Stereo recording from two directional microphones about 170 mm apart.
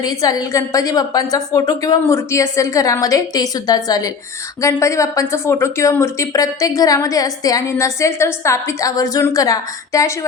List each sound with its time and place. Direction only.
0.0 s speech: 20° left (ahead or behind)